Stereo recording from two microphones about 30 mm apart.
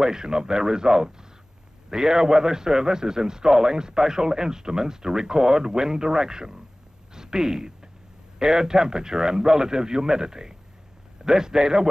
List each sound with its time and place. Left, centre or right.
0.0 s a man's voice: right
7.2 s a sound: right
8.4 s a man's voice: right